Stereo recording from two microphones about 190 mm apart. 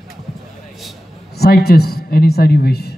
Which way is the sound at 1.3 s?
55° left (ahead or behind).